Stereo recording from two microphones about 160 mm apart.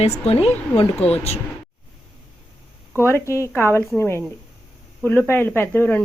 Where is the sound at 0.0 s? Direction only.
40° left (ahead or behind).